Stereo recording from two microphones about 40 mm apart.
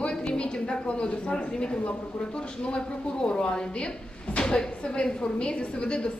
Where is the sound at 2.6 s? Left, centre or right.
Left.